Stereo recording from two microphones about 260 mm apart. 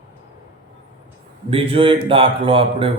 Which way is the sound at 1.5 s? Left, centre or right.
Right.